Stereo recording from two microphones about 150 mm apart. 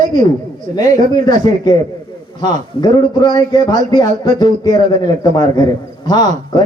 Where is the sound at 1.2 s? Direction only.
25° left (ahead or behind).